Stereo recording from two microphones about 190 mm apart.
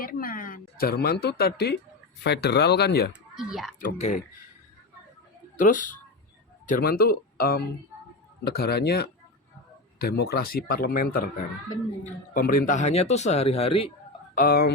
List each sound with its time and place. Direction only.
0.0 s speech: 50° left (ahead or behind)
3.1 s speech: centre (ahead or behind)
3.8 s speech: 40° left (ahead or behind)
5.5 s speech: 45° left (ahead or behind)
14.3 s speech: 55° left (ahead or behind)